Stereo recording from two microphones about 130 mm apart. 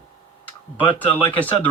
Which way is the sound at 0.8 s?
40° left (ahead or behind).